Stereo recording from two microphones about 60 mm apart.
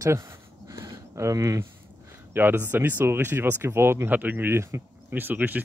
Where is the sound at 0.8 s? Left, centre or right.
Right.